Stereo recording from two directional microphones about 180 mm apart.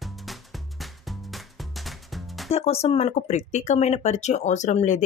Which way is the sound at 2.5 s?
35° left (ahead or behind).